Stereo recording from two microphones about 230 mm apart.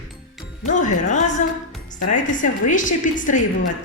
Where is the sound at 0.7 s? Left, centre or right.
Left.